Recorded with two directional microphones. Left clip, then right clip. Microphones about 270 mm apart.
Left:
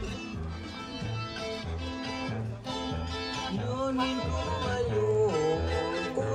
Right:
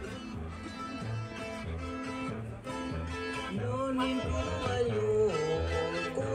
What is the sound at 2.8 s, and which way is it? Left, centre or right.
Music, left.